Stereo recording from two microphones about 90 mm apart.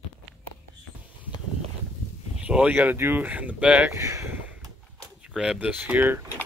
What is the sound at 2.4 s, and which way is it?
Speech, 15° right (ahead or behind).